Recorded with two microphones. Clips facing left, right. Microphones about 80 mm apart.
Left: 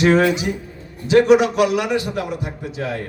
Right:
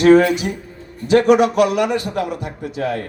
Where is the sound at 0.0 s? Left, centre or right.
Right.